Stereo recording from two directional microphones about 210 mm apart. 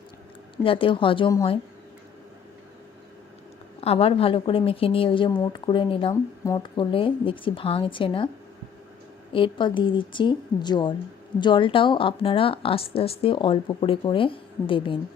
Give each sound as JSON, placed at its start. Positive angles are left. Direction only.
{"t": 0.5, "sound": "a woman's voice", "side_deg": 25}
{"t": 3.8, "sound": "a woman's voice", "side_deg": 30}
{"t": 9.3, "sound": "a woman's voice", "side_deg": 25}